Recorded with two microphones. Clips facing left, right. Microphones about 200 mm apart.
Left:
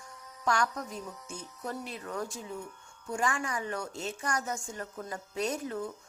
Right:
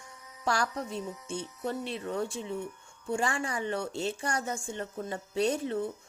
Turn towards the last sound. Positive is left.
turn(degrees=-30)  # may be behind; listen again after turning